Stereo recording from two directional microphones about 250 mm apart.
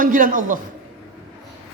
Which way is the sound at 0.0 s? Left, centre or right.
Right.